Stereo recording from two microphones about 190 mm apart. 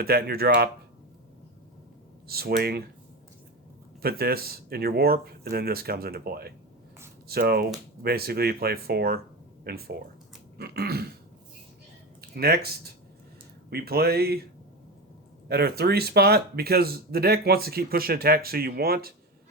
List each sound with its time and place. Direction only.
0.0 s speech: 55° right (ahead or behind)
2.2 s speech: 55° right (ahead or behind)
4.0 s speech: 55° right (ahead or behind)
12.3 s speech: 55° right (ahead or behind)
15.4 s speech: 55° right (ahead or behind)